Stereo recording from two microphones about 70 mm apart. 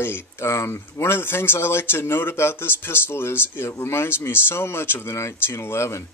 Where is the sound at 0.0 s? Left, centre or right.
Left.